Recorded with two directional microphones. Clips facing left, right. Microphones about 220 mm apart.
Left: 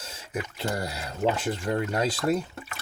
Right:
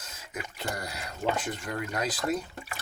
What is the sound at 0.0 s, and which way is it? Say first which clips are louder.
Speech: left 6 dB; 30° left (ahead or behind).